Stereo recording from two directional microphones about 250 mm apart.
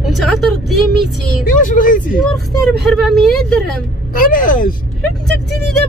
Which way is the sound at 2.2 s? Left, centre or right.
Centre.